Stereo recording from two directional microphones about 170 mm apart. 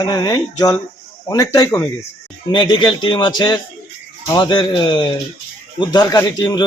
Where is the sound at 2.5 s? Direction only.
30° left (ahead or behind).